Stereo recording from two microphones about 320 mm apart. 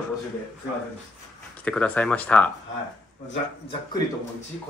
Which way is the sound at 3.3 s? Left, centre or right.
Centre.